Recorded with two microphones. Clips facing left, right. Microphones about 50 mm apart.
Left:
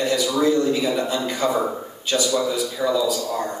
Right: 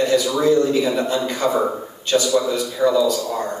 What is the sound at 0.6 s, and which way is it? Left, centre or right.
Speech, right.